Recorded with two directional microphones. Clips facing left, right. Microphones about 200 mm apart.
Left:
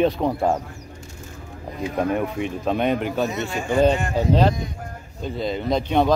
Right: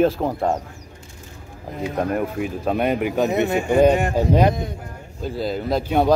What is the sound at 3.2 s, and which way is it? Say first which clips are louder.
Speech: right 6 dB; 60° right (ahead or behind).